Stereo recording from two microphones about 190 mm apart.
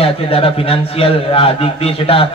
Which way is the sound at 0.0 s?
30° left (ahead or behind).